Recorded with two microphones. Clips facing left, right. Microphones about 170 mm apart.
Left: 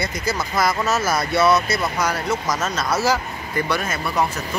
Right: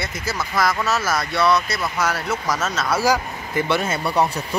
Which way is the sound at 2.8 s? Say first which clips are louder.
Right 2 dB; 10° right (ahead or behind).